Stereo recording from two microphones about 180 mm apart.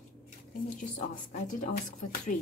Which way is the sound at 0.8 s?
45° left (ahead or behind).